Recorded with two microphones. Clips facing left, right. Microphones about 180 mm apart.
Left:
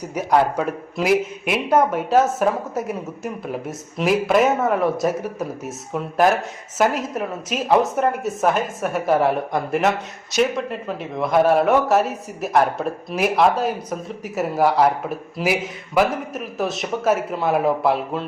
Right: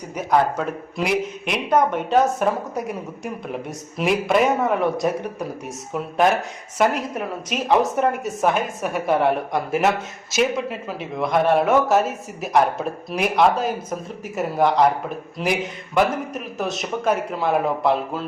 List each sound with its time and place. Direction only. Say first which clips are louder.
0.1 s a man's voice: left 1 dB; 10° left (ahead or behind)